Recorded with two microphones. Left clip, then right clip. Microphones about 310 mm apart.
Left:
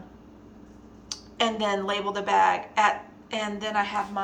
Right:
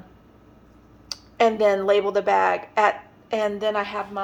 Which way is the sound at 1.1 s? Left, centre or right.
Centre.